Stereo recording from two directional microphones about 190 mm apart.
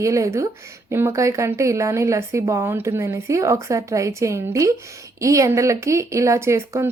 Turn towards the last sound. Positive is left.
turn(degrees=-15)  # may be behind; listen again after turning